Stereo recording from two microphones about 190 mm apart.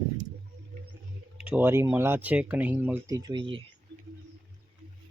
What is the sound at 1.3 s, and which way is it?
Speech, 10° right (ahead or behind).